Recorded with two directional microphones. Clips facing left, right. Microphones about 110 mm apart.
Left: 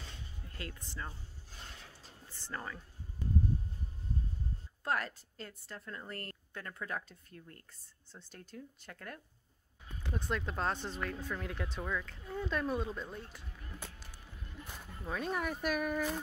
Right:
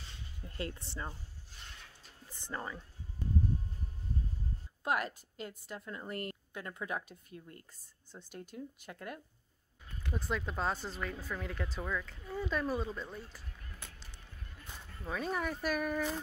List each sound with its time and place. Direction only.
0.6 s speech: 25° right (ahead or behind)
2.3 s speech: 15° right (ahead or behind)
4.8 s a woman's voice: 15° right (ahead or behind)
14.7 s music: 10° left (ahead or behind)
15.0 s speech: centre (ahead or behind)